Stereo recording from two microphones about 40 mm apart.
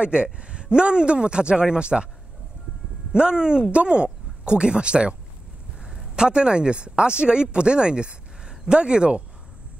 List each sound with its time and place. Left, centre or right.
0.0 s a man's voice: right
3.1 s a man's voice: centre